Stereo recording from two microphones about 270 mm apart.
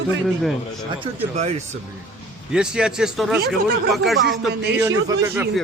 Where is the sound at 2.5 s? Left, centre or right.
Centre.